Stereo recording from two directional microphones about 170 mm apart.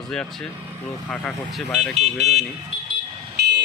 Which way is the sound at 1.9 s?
40° right (ahead or behind).